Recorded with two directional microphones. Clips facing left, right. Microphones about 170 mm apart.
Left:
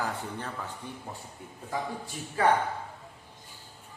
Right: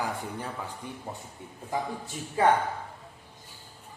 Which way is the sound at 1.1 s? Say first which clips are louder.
Right 2 dB; 25° right (ahead or behind).